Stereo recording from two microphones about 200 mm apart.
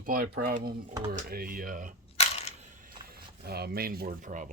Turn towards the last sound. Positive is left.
turn(degrees=-40)  # may be behind; listen again after turning